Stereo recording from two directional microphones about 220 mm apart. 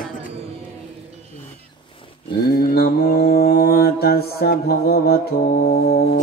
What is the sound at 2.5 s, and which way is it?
Mantra, 45° left (ahead or behind).